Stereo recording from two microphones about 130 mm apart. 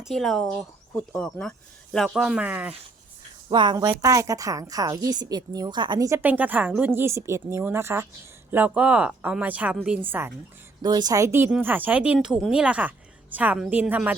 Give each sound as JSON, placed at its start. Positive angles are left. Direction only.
{"t": 0.0, "sound": "speech", "side_deg": 0}
{"t": 3.5, "sound": "a woman's voice", "side_deg": -35}
{"t": 6.1, "sound": "a woman's voice", "side_deg": -25}
{"t": 10.8, "sound": "a woman's voice", "side_deg": -30}